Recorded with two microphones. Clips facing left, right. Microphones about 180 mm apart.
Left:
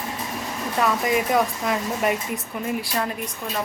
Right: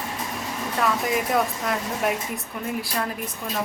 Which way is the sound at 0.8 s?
Centre (ahead or behind).